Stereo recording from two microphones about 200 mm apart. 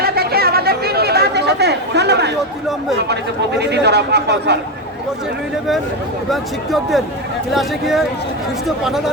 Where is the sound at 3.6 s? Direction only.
55° right (ahead or behind).